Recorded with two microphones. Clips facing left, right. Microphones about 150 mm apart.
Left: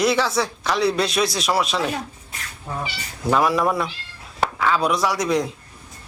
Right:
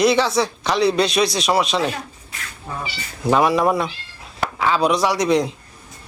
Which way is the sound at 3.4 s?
25° right (ahead or behind).